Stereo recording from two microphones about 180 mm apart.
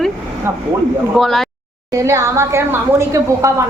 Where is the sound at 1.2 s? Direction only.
Centre (ahead or behind).